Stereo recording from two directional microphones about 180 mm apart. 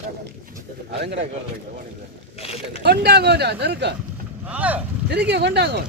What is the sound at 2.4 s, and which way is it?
Speech, 35° left (ahead or behind).